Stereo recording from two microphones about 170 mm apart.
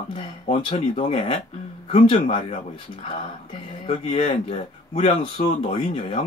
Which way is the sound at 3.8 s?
35° left (ahead or behind).